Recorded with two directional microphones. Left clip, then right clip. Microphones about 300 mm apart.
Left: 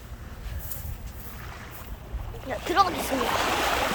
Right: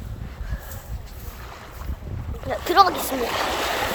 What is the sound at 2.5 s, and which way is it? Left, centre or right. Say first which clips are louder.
Speech: right 6 dB; centre.